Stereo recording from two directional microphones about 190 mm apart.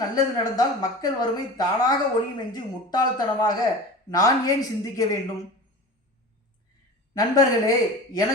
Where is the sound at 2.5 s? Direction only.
20° left (ahead or behind).